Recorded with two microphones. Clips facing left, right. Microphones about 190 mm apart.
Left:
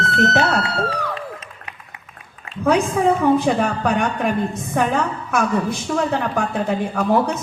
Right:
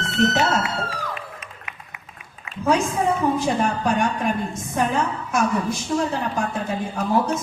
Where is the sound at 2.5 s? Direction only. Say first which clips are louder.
Left 2 dB; 35° left (ahead or behind).